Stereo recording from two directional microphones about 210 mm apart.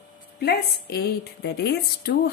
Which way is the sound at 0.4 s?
50° left (ahead or behind).